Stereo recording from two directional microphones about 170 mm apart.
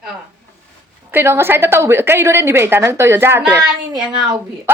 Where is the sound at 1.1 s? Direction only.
15° right (ahead or behind).